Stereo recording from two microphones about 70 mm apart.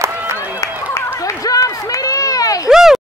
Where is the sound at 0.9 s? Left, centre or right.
Left.